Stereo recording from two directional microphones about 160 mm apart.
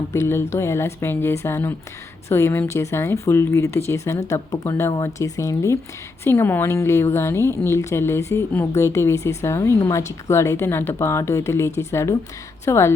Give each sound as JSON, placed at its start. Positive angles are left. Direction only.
{"t": 0.1, "sound": "a woman's voice", "side_deg": 15}